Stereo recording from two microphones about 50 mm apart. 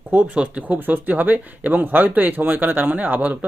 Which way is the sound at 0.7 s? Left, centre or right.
Right.